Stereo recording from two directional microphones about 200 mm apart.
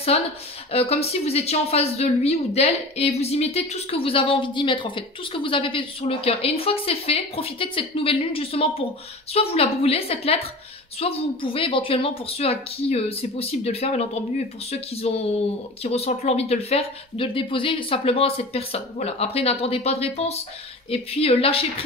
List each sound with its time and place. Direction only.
0.7 s a woman's voice: 30° left (ahead or behind)